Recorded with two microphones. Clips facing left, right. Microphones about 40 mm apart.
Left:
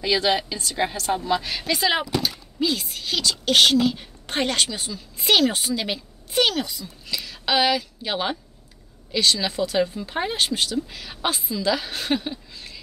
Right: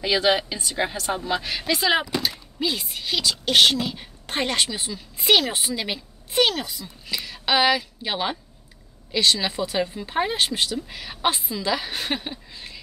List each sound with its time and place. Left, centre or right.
0.0 s a woman's voice: centre
9.2 s a woman's voice: right